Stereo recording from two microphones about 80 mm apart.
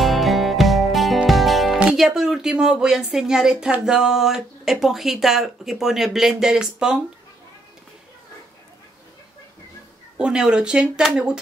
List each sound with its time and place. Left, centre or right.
0.0 s music: centre
1.8 s speech: centre
10.1 s speech: centre